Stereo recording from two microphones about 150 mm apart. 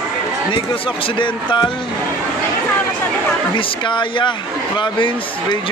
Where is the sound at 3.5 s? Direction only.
35° left (ahead or behind).